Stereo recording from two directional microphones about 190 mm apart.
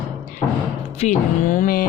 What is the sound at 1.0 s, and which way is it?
Speech, 40° left (ahead or behind).